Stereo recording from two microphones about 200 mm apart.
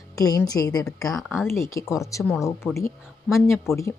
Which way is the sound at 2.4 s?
15° left (ahead or behind).